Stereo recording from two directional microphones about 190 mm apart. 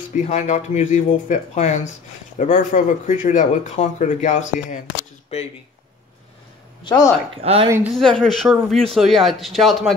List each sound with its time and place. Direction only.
0.1 s speech: 40° left (ahead or behind)
6.8 s speech: 25° left (ahead or behind)
7.4 s speech: 30° right (ahead or behind)
7.9 s speech: 5° left (ahead or behind)